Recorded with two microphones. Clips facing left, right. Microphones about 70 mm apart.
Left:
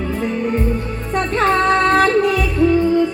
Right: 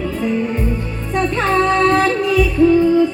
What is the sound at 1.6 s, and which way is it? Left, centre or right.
Music, left.